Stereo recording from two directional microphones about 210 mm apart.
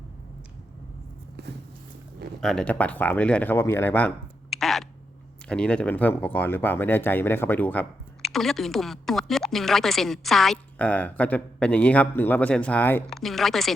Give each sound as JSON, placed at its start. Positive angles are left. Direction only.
{"t": 1.4, "sound": "walk", "side_deg": -50}
{"t": 2.4, "sound": "speech", "side_deg": 5}